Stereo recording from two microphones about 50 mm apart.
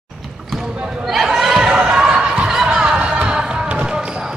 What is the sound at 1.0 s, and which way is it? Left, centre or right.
Chatter, centre.